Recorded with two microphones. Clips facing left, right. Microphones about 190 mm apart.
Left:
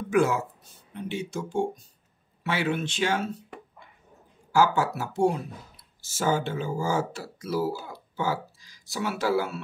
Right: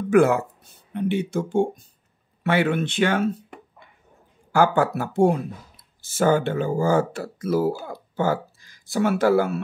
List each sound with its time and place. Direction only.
0.1 s speech: 55° right (ahead or behind)
4.5 s speech: 55° right (ahead or behind)